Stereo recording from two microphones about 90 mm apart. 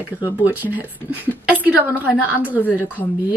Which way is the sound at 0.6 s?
20° right (ahead or behind).